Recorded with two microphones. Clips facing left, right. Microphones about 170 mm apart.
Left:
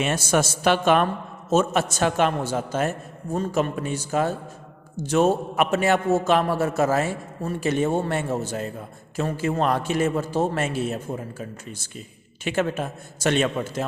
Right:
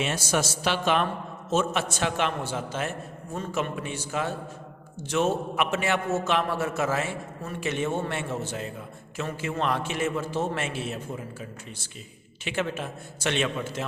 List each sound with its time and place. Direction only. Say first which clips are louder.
0.0 s a man's voice: left 5 dB; 50° left (ahead or behind)